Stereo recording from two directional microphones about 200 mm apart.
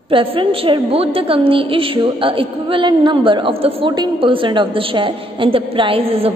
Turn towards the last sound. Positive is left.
turn(degrees=-30)  # may be behind; listen again after turning